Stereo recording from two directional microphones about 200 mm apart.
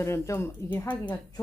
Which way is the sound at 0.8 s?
20° left (ahead or behind).